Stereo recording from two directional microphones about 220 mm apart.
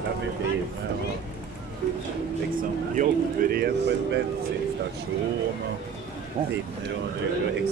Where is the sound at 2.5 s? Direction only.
40° right (ahead or behind).